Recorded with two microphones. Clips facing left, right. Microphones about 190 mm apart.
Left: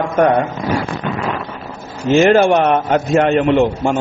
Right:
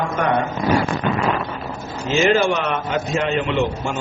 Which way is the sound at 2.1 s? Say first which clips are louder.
Left 7 dB; 55° left (ahead or behind).